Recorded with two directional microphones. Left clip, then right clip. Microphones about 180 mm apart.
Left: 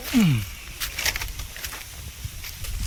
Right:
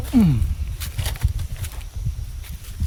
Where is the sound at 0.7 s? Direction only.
15° right (ahead or behind).